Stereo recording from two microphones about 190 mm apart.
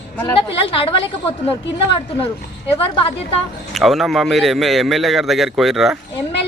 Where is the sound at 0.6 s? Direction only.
30° left (ahead or behind).